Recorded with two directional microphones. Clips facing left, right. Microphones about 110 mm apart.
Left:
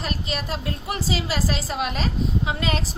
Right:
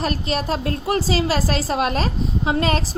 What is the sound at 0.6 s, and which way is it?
Speech, 50° right (ahead or behind).